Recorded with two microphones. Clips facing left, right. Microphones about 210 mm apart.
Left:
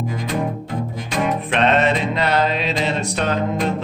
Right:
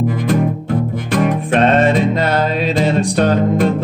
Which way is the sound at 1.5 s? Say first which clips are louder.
Right 5 dB; 45° right (ahead or behind).